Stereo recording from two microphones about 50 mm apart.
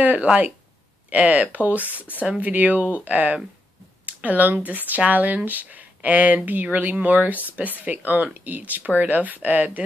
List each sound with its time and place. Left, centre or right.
0.0 s speech: right
2.2 s speech: right
4.0 s a sound: right
4.6 s speech: right